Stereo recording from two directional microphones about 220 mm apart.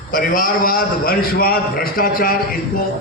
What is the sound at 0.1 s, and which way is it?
A man's voice, 40° left (ahead or behind).